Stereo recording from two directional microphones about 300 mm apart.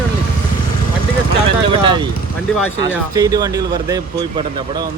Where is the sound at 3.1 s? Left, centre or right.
Centre.